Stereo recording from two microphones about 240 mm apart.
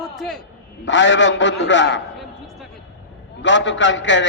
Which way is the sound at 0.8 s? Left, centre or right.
Left.